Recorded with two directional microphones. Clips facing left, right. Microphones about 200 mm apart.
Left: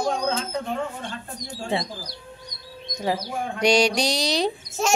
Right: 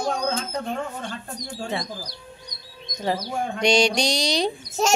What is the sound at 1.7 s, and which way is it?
Speech, 30° left (ahead or behind).